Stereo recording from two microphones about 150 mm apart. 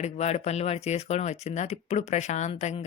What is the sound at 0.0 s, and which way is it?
Speech, 45° left (ahead or behind).